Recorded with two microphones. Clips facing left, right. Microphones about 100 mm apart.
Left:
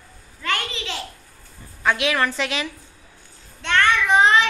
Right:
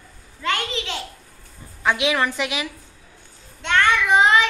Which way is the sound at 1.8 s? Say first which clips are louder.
Even; 15° right (ahead or behind).